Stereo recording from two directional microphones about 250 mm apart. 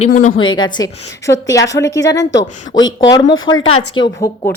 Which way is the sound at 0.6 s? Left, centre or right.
Centre.